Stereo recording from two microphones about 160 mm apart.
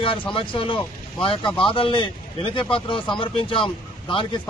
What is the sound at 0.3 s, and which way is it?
A man's voice, 35° left (ahead or behind).